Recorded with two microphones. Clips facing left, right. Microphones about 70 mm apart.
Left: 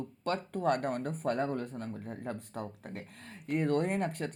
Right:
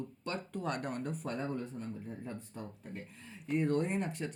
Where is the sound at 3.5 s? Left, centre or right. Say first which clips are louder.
Left 2 dB; left.